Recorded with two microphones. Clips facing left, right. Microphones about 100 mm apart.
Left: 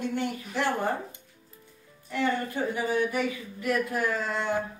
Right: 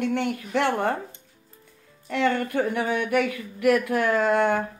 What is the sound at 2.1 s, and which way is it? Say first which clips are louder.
Speech: right 4 dB; 70° right (ahead or behind).